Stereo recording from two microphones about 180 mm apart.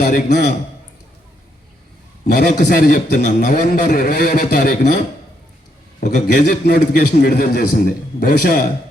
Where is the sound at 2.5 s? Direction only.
50° left (ahead or behind).